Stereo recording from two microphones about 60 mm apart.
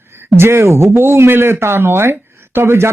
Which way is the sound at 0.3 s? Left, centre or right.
Right.